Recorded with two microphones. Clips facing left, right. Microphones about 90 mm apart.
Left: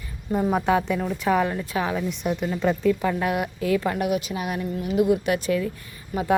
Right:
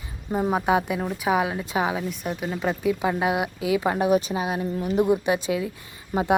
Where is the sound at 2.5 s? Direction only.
10° right (ahead or behind).